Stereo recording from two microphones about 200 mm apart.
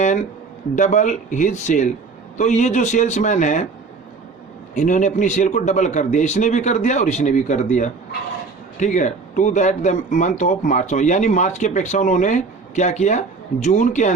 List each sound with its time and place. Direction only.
0.8 s speech: 40° left (ahead or behind)
4.7 s speech: 35° left (ahead or behind)